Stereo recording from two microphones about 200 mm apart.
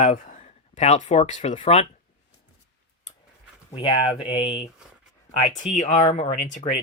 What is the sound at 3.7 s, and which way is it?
Speech, 25° left (ahead or behind).